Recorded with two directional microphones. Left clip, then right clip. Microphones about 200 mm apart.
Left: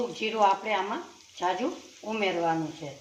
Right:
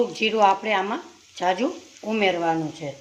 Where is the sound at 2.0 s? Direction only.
60° right (ahead or behind).